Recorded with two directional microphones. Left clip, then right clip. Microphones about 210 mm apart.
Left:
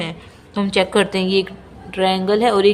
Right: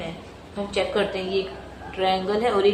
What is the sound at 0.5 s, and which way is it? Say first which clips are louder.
A woman's voice: left 7 dB; 65° left (ahead or behind).